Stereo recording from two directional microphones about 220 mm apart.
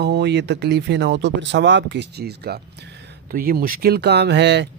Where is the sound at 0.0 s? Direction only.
50° right (ahead or behind).